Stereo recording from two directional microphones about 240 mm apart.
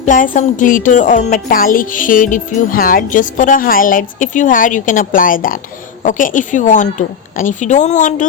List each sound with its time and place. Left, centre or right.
0.0 s speech: left